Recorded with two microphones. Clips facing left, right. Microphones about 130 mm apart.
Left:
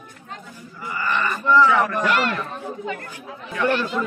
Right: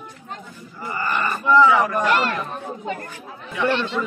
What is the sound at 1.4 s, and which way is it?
Speech, 15° right (ahead or behind).